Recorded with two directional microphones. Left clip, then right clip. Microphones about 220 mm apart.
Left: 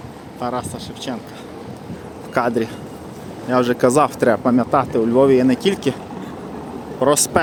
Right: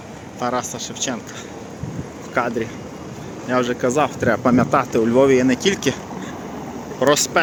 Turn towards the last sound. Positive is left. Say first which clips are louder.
# even
turn(degrees=20)  # may be behind; listen again after turning